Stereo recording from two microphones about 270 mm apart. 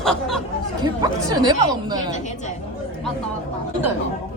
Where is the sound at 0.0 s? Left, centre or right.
Centre.